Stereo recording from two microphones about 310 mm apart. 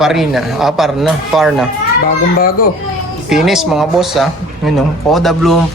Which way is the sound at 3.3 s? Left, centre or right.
Centre.